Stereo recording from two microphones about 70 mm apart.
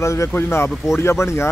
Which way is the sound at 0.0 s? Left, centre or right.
Left.